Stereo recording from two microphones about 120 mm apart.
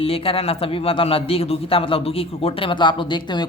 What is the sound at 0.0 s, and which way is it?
A man's voice, 50° left (ahead or behind).